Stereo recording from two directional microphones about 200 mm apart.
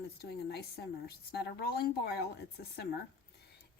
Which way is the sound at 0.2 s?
55° left (ahead or behind).